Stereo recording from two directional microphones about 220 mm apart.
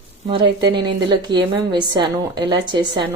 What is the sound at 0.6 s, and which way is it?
Speech, 20° right (ahead or behind).